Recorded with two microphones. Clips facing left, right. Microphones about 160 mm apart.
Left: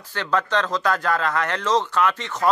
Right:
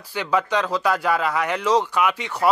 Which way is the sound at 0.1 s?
10° right (ahead or behind).